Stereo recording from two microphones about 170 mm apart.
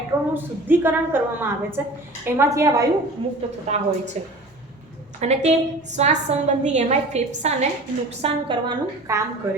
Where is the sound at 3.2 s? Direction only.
30° right (ahead or behind).